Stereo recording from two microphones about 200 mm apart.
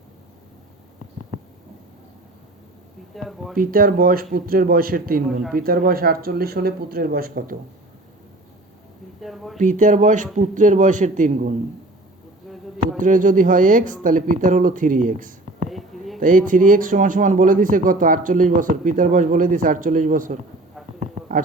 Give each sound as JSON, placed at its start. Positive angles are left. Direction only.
{"t": 3.2, "sound": "speech", "side_deg": 0}
{"t": 3.6, "sound": "speech", "side_deg": -45}
{"t": 5.3, "sound": "speech", "side_deg": 0}
{"t": 5.5, "sound": "speech", "side_deg": -45}
{"t": 9.2, "sound": "speech", "side_deg": 0}
{"t": 9.6, "sound": "speech", "side_deg": -40}
{"t": 13.0, "sound": "speech", "side_deg": -40}
{"t": 15.7, "sound": "a sound", "side_deg": 0}
{"t": 16.2, "sound": "speech", "side_deg": -40}